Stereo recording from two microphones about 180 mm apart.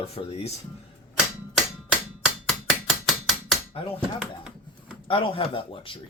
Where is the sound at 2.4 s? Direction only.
Centre (ahead or behind).